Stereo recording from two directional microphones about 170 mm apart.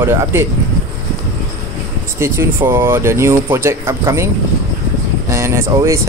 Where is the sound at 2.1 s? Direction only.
15° right (ahead or behind).